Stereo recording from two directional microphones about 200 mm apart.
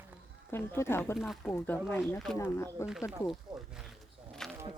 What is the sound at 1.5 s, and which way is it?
Speech, 10° left (ahead or behind).